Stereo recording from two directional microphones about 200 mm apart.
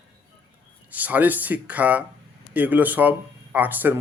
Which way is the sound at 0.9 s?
10° right (ahead or behind).